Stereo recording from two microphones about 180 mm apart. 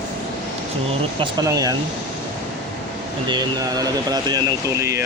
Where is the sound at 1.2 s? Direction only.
20° right (ahead or behind).